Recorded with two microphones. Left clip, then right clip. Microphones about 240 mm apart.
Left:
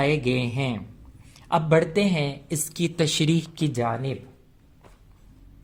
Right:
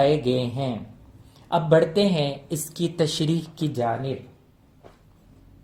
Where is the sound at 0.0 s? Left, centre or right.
Left.